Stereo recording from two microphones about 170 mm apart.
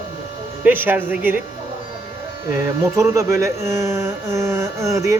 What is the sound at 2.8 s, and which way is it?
Speech, 15° right (ahead or behind).